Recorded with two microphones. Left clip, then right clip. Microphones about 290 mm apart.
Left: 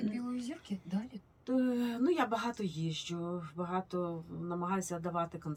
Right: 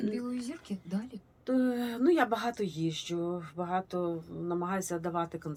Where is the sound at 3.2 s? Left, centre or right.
Left.